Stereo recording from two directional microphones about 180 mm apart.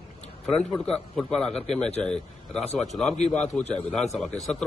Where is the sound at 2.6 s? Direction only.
35° left (ahead or behind).